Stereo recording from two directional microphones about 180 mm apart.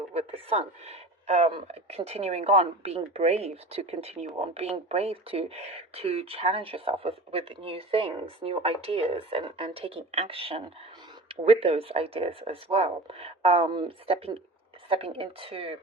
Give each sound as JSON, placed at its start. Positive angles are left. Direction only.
{"t": 0.1, "sound": "speech", "side_deg": -35}